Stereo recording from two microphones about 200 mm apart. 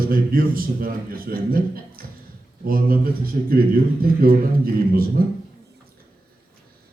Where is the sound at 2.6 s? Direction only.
45° right (ahead or behind).